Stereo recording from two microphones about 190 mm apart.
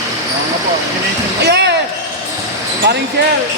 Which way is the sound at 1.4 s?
60° right (ahead or behind).